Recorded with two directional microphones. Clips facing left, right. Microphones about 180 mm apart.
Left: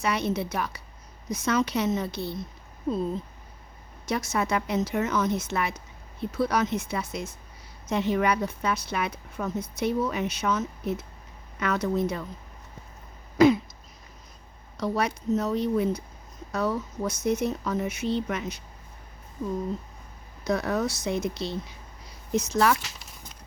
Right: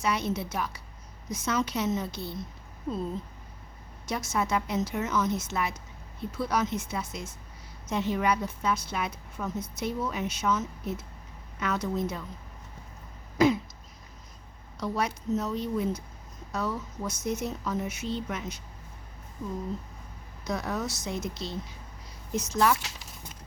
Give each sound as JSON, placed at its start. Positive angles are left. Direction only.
{"t": 0.0, "sound": "a woman's voice", "side_deg": 65}
{"t": 4.1, "sound": "a woman's voice", "side_deg": 65}
{"t": 13.4, "sound": "a woman's voice", "side_deg": 65}
{"t": 14.8, "sound": "a woman's voice", "side_deg": 65}
{"t": 20.4, "sound": "a woman's voice", "side_deg": 60}